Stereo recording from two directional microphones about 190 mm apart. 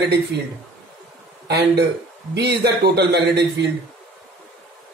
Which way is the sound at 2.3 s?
60° right (ahead or behind).